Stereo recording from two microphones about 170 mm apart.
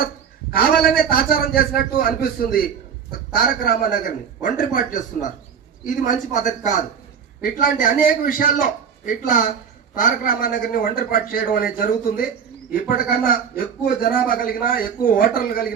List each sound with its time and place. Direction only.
0.5 s a man's voice: 65° left (ahead or behind)